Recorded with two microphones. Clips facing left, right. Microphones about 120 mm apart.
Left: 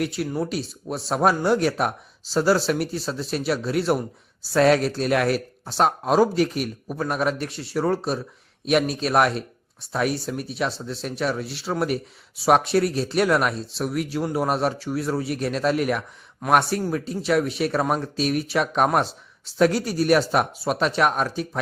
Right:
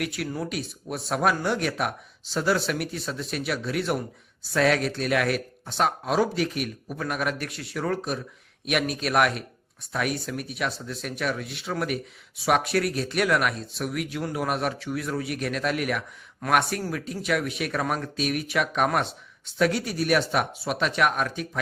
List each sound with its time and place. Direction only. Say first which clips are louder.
0.0 s speech: left 4 dB; 30° left (ahead or behind)